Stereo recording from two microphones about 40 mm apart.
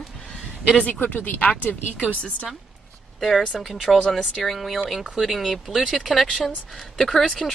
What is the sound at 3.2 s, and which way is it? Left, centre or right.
Speech, centre.